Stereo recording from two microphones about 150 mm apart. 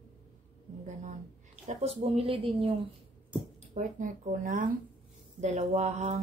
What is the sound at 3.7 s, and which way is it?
A woman's voice, 55° right (ahead or behind).